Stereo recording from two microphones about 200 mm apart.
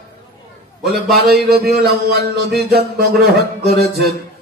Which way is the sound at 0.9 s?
50° right (ahead or behind).